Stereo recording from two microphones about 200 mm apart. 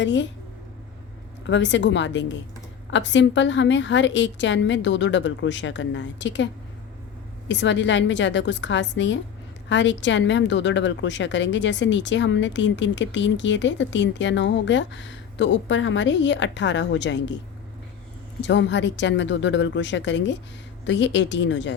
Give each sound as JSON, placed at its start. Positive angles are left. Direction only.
{"t": 0.0, "sound": "a woman's voice", "side_deg": 65}
{"t": 1.5, "sound": "a woman's voice", "side_deg": 65}
{"t": 18.4, "sound": "a woman's voice", "side_deg": 65}